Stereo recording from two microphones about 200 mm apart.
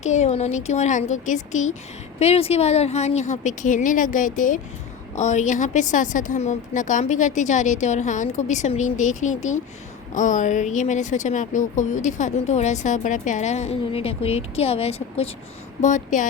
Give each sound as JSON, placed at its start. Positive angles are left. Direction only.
{"t": 0.0, "sound": "speech", "side_deg": 35}